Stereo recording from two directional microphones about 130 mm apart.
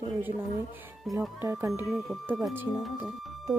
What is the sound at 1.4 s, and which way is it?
Speech, 20° right (ahead or behind).